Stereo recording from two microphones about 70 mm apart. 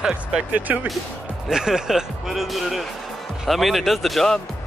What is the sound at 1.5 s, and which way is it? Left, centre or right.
Speech, centre.